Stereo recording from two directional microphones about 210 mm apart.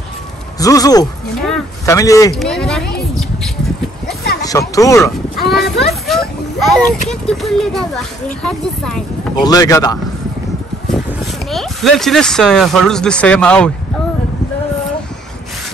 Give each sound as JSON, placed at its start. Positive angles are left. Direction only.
{"t": 0.6, "sound": "speech", "side_deg": 15}
{"t": 2.3, "sound": "a sound", "side_deg": 0}
{"t": 4.4, "sound": "speech", "side_deg": 15}
{"t": 5.4, "sound": "a sound", "side_deg": 50}
{"t": 6.0, "sound": "speech", "side_deg": 0}
{"t": 9.4, "sound": "speech", "side_deg": 15}
{"t": 11.5, "sound": "speech", "side_deg": 0}